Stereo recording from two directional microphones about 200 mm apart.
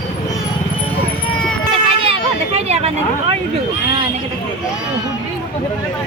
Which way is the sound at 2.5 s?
30° right (ahead or behind).